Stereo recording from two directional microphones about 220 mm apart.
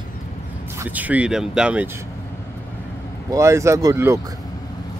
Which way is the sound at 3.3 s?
15° right (ahead or behind).